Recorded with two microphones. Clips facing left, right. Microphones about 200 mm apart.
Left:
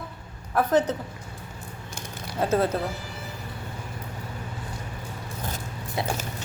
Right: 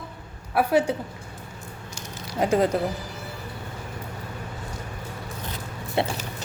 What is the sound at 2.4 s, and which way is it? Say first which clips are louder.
Speech: right 2 dB; 15° right (ahead or behind).